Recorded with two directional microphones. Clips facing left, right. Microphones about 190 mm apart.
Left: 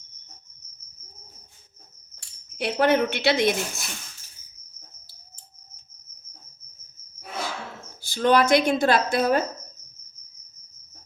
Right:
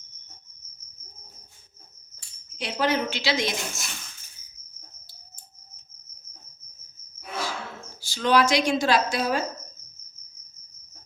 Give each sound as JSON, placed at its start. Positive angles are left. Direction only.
{"t": 2.1, "sound": "speech", "side_deg": 60}
{"t": 8.0, "sound": "a woman's voice", "side_deg": 55}